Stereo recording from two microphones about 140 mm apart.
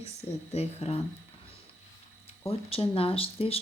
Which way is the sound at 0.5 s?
50° left (ahead or behind).